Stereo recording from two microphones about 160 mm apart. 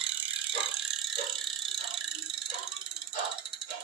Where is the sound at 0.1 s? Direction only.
10° right (ahead or behind).